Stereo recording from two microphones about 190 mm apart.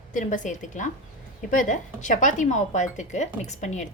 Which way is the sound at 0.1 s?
40° left (ahead or behind).